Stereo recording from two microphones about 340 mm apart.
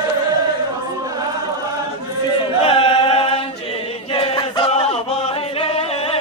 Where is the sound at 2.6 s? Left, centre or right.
Centre.